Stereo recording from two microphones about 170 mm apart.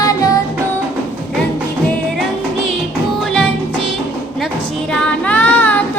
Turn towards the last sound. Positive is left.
turn(degrees=10)  # may be behind; listen again after turning